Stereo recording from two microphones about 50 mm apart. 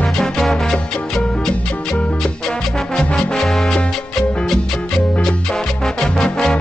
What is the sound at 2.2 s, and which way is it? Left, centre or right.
Music, centre.